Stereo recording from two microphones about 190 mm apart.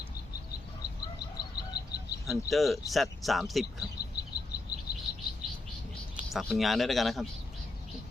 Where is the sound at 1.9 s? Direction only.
55° left (ahead or behind).